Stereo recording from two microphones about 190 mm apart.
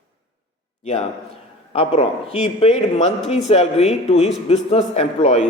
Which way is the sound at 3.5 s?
35° left (ahead or behind).